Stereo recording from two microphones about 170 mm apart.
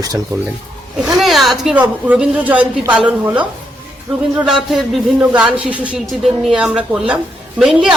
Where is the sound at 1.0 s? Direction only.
5° right (ahead or behind).